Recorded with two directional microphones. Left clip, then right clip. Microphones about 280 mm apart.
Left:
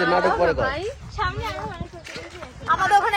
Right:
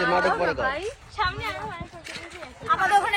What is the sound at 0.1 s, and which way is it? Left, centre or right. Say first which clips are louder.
Speech: left 3 dB; left.